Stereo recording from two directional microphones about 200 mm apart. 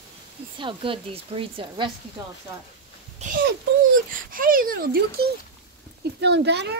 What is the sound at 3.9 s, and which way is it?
A child's voice, 45° right (ahead or behind).